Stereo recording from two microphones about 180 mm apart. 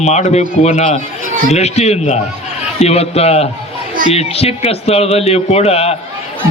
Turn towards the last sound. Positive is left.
turn(degrees=35)  # may be behind; listen again after turning